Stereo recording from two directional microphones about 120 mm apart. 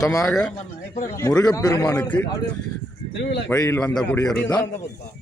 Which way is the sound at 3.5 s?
20° left (ahead or behind).